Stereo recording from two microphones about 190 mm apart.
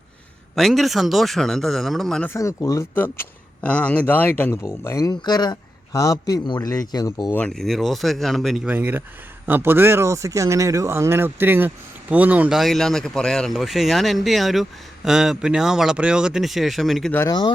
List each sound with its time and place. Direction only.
0.5 s speech: centre (ahead or behind)
2.3 s speech: 15° left (ahead or behind)
7.3 s speech: 5° left (ahead or behind)
17.2 s speech: 20° left (ahead or behind)